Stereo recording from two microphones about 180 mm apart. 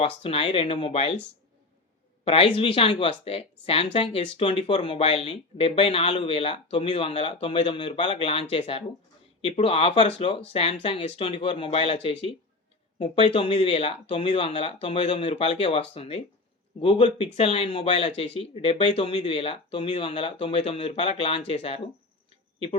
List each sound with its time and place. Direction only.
0.0 s speech: 30° left (ahead or behind)
2.2 s speech: 30° left (ahead or behind)